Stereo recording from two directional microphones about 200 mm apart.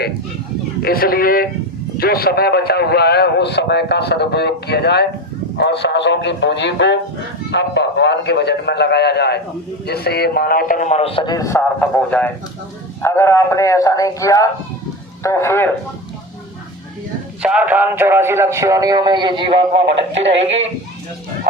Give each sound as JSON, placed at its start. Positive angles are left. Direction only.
{"t": 0.8, "sound": "a man's voice", "side_deg": 50}
{"t": 17.4, "sound": "speech", "side_deg": -5}
{"t": 20.0, "sound": "speech", "side_deg": -65}
{"t": 20.4, "sound": "speech", "side_deg": -30}